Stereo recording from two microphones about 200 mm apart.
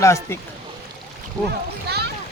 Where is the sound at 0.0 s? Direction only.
15° left (ahead or behind).